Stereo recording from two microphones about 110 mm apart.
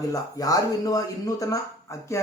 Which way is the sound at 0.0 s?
35° left (ahead or behind).